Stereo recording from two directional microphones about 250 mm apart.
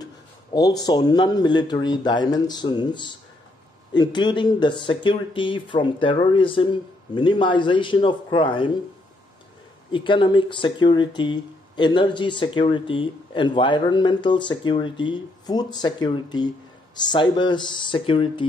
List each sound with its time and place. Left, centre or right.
0.0 s speech: centre
9.9 s speech: centre